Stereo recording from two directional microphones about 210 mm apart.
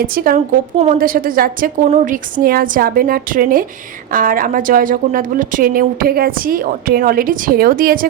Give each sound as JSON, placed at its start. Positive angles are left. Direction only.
{"t": 0.0, "sound": "a woman's voice", "side_deg": -40}